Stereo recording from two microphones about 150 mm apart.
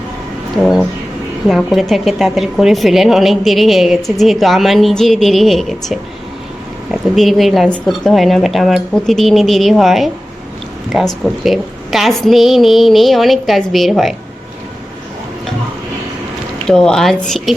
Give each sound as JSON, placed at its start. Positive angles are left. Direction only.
{"t": 1.5, "sound": "a woman's voice", "side_deg": 0}
{"t": 7.2, "sound": "a woman's voice", "side_deg": 0}
{"t": 16.6, "sound": "a woman's voice", "side_deg": 5}